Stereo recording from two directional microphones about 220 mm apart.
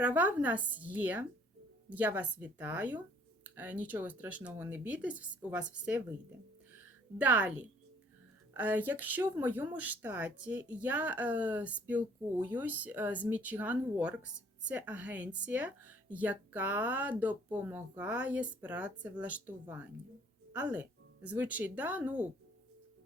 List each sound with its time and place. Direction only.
0.0 s speech: 5° right (ahead or behind)
7.2 s speech: 5° right (ahead or behind)